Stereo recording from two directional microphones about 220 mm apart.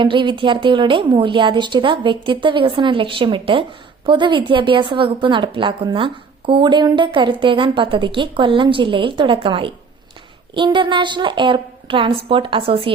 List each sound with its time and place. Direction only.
0.0 s a woman's voice: 20° right (ahead or behind)